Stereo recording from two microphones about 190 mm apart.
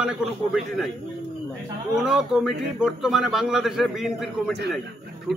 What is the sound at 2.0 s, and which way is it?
A man's voice, 5° right (ahead or behind).